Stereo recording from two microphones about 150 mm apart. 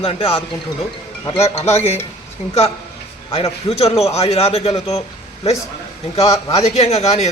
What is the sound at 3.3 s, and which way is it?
A man's voice, 45° left (ahead or behind).